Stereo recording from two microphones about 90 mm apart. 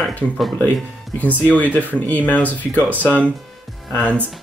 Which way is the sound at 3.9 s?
15° left (ahead or behind).